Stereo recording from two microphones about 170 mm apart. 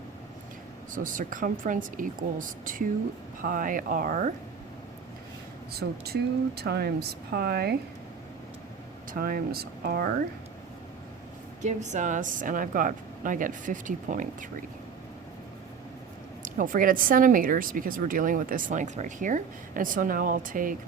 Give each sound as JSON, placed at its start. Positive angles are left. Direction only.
{"t": 0.9, "sound": "speech", "side_deg": -50}
{"t": 5.7, "sound": "speech", "side_deg": -70}
{"t": 9.1, "sound": "speech", "side_deg": -60}
{"t": 11.6, "sound": "speech", "side_deg": -45}
{"t": 16.4, "sound": "speech", "side_deg": -55}